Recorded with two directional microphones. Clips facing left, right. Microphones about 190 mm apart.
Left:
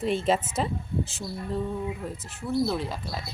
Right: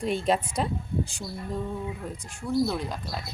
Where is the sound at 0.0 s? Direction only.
Centre (ahead or behind).